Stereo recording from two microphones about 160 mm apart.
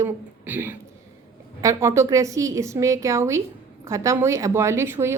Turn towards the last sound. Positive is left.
turn(degrees=-15)  # may be behind; listen again after turning